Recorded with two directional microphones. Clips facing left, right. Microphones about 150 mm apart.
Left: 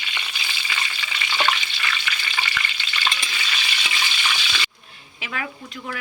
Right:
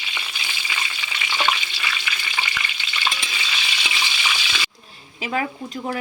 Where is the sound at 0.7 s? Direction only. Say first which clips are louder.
Even; 10° right (ahead or behind).